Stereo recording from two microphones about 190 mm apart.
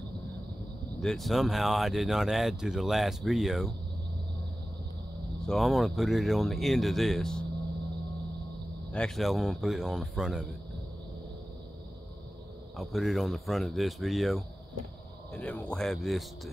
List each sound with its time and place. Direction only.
1.0 s speech: centre (ahead or behind)
5.5 s speech: centre (ahead or behind)
8.9 s speech: 5° left (ahead or behind)
12.7 s speech: centre (ahead or behind)